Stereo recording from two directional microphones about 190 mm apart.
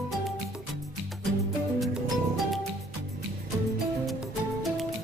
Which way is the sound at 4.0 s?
Centre (ahead or behind).